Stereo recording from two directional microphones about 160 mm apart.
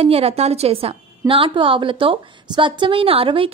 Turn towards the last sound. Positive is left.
turn(degrees=-35)  # may be behind; listen again after turning